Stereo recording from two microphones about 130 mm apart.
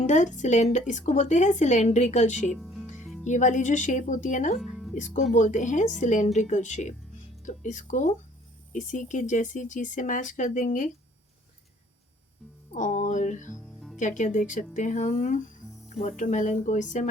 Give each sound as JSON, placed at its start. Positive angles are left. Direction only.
{"t": 0.0, "sound": "a woman's voice", "side_deg": 70}
{"t": 2.6, "sound": "music", "side_deg": 0}
{"t": 3.2, "sound": "a woman's voice", "side_deg": 70}
{"t": 4.5, "sound": "music", "side_deg": 0}
{"t": 4.9, "sound": "a woman's voice", "side_deg": 70}
{"t": 12.7, "sound": "a woman's voice", "side_deg": 75}